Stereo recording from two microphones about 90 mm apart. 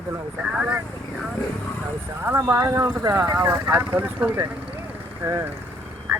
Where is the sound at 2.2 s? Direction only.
30° right (ahead or behind).